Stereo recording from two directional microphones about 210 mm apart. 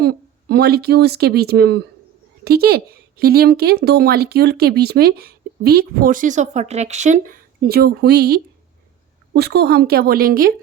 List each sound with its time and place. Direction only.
0.0 s speech: 50° right (ahead or behind)